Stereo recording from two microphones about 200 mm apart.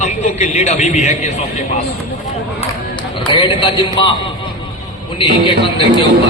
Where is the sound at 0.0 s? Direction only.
35° left (ahead or behind).